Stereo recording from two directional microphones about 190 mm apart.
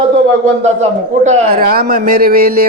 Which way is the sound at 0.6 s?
35° right (ahead or behind).